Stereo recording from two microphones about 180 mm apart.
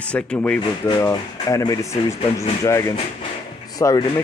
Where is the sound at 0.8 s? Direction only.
20° left (ahead or behind).